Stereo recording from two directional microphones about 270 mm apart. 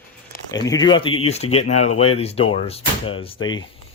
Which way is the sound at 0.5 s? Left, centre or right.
Centre.